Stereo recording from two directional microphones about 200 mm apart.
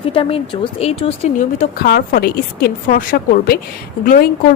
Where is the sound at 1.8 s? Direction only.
55° left (ahead or behind).